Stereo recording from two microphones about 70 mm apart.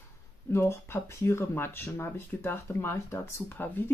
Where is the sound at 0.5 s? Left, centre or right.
Left.